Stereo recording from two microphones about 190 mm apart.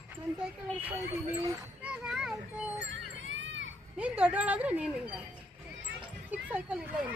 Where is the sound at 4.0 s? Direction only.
5° right (ahead or behind).